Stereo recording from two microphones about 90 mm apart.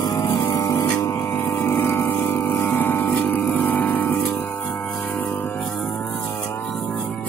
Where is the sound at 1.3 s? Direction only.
25° left (ahead or behind).